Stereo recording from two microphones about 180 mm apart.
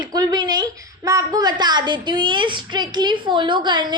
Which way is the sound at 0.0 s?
25° right (ahead or behind).